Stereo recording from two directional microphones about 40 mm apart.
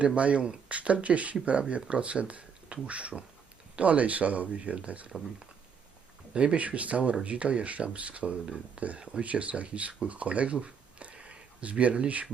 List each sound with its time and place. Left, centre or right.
0.0 s speech: right
6.3 s speech: right